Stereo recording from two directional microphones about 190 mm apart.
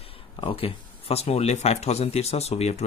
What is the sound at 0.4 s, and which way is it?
Speech, 30° left (ahead or behind).